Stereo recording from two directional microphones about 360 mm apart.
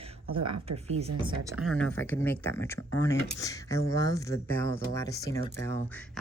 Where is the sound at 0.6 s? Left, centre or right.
Centre.